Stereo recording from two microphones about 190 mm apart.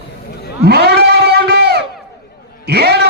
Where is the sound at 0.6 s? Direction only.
55° right (ahead or behind).